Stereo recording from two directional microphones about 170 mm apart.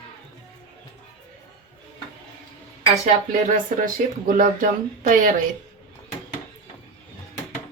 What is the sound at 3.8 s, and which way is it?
Speech, 50° right (ahead or behind).